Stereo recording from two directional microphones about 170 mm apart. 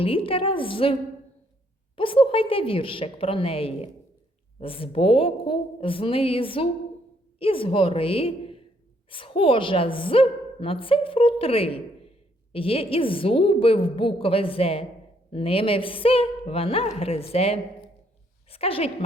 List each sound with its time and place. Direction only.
0.0 s a woman's voice: 30° left (ahead or behind)
2.0 s a woman's voice: 30° left (ahead or behind)